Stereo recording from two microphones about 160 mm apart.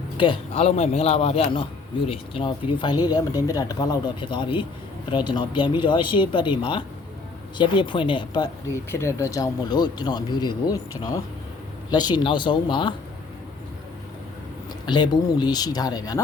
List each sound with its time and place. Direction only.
0.2 s speech: 35° left (ahead or behind)
14.8 s speech: 25° left (ahead or behind)